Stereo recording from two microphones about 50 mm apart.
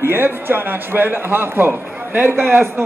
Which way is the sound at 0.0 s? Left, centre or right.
Right.